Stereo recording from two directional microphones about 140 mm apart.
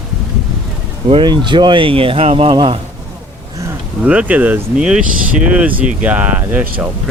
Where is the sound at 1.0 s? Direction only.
35° right (ahead or behind).